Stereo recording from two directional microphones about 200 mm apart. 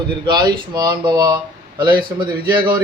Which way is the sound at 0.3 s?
20° right (ahead or behind).